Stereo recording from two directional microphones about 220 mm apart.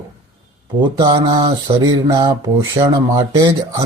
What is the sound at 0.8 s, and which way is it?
Mantra, 20° right (ahead or behind).